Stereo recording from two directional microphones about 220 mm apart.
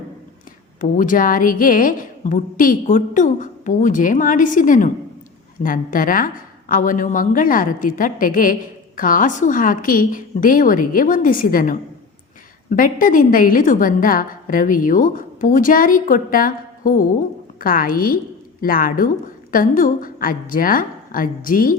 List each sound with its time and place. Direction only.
0.8 s a woman's voice: 35° left (ahead or behind)